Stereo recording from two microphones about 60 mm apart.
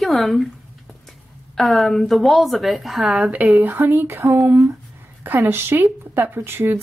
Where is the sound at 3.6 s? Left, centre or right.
Right.